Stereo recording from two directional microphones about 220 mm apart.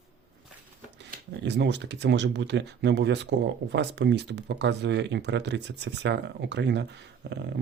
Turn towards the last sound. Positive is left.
turn(degrees=-50)  # may be behind; listen again after turning